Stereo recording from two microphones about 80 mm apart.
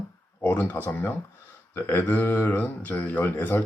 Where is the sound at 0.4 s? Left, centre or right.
Left.